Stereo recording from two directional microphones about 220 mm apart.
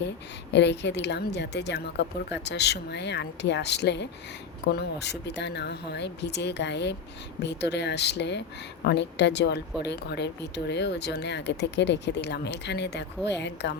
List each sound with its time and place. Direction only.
0.5 s speech: 50° left (ahead or behind)